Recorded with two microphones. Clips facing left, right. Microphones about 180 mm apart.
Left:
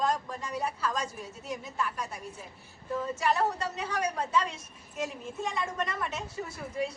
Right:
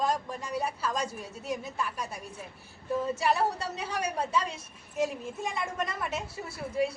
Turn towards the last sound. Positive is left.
turn(degrees=-10)  # may be behind; listen again after turning